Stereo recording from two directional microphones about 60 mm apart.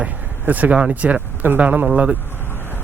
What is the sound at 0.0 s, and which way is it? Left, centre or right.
Speech, right.